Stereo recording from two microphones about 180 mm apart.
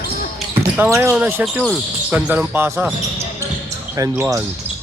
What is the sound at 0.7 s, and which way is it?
Speech, 10° right (ahead or behind).